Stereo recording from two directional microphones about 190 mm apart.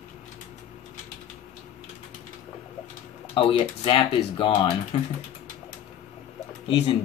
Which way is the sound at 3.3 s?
25° left (ahead or behind).